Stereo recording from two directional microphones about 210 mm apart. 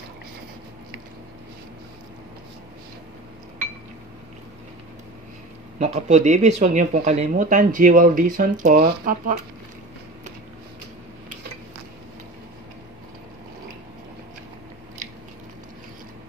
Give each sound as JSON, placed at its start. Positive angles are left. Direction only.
{"t": 5.8, "sound": "speech", "side_deg": -35}